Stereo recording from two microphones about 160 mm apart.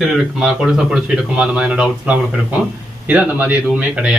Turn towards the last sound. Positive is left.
turn(degrees=-5)  # may be behind; listen again after turning